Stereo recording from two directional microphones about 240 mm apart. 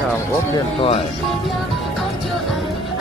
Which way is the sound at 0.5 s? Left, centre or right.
Left.